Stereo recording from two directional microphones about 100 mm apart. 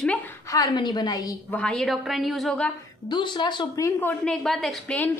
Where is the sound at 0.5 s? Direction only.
40° left (ahead or behind).